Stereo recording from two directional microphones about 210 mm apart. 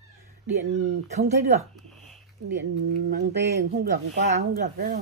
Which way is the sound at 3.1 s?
55° right (ahead or behind).